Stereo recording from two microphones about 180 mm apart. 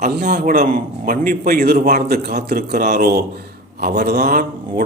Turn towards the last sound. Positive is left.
turn(degrees=-55)  # may be behind; listen again after turning